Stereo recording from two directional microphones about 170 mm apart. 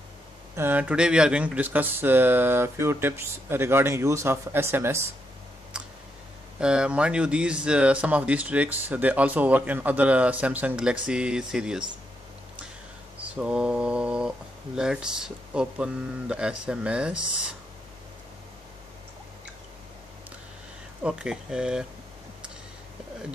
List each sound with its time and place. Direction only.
0.6 s speech: 10° right (ahead or behind)
6.6 s speech: 5° right (ahead or behind)
13.2 s mantra: 5° right (ahead or behind)
14.8 s speech: 5° right (ahead or behind)
21.0 s speech: 5° right (ahead or behind)